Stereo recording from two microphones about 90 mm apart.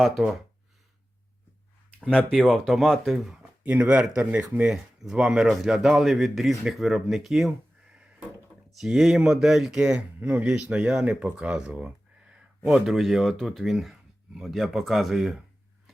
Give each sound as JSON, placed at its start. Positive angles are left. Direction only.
{"t": 0.0, "sound": "speech", "side_deg": 0}
{"t": 2.0, "sound": "speech", "side_deg": 10}
{"t": 3.6, "sound": "speech", "side_deg": -15}
{"t": 8.7, "sound": "speech", "side_deg": -5}